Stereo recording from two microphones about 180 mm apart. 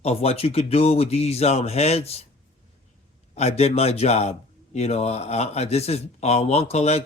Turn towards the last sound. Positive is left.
turn(degrees=35)  # may be behind; listen again after turning